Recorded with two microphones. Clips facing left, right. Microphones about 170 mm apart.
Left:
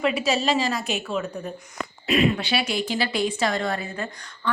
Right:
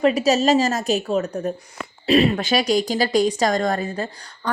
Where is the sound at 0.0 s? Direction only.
40° right (ahead or behind).